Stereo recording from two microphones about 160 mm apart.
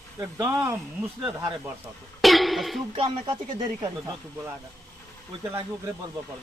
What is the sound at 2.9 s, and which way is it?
Speech, 35° right (ahead or behind).